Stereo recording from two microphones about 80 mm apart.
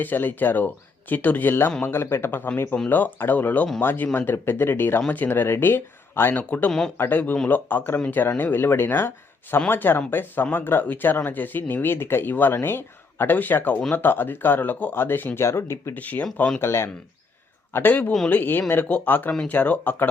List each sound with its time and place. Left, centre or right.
0.0 s speech: left
6.7 s speech: centre
7.0 s speech: left
16.2 s speech: centre
16.6 s speech: left